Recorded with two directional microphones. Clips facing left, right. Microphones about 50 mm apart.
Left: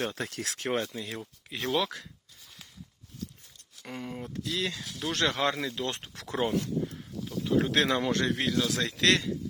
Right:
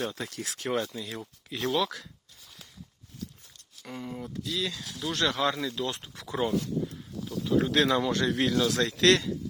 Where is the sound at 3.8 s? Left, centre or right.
Left.